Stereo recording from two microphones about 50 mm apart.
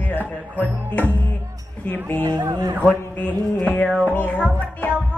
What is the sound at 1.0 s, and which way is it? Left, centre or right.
Music, left.